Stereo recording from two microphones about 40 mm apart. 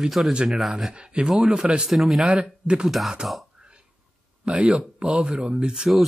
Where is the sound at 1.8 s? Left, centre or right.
Centre.